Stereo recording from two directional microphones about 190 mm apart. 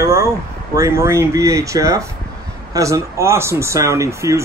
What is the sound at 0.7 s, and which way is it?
Speech, 15° right (ahead or behind).